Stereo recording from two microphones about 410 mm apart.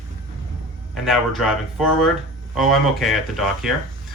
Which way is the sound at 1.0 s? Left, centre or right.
Centre.